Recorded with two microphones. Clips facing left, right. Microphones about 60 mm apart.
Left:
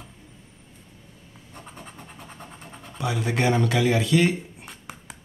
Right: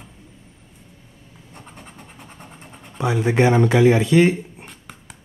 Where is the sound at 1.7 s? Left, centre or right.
Centre.